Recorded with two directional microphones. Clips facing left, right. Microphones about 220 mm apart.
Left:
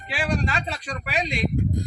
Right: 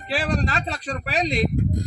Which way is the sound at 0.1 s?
40° right (ahead or behind).